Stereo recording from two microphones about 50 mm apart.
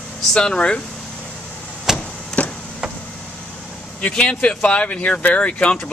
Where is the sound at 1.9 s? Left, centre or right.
Left.